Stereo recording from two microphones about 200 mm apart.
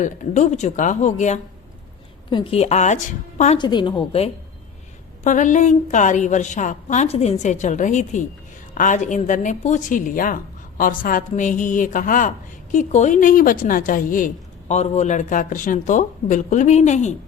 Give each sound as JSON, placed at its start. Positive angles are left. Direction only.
{"t": 0.0, "sound": "a woman's voice", "side_deg": 35}
{"t": 3.6, "sound": "a woman's voice", "side_deg": 20}
{"t": 5.2, "sound": "a woman's voice", "side_deg": 40}